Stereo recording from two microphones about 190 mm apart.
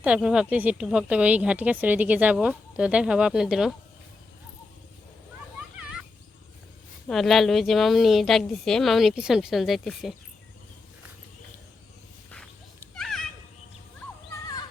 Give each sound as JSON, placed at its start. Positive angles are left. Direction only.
{"t": 0.0, "sound": "speech", "side_deg": -5}
{"t": 7.1, "sound": "speech", "side_deg": 0}
{"t": 12.9, "sound": "children playing", "side_deg": 0}